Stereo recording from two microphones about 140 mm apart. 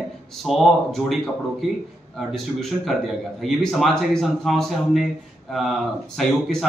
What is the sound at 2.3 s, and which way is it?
A man's voice, centre (ahead or behind).